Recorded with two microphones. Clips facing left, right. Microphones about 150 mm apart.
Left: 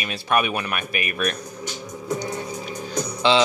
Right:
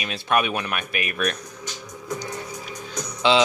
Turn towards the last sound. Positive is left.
turn(degrees=30)  # may be behind; listen again after turning